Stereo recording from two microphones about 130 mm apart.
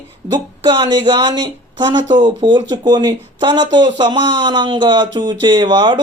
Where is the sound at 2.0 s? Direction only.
75° right (ahead or behind).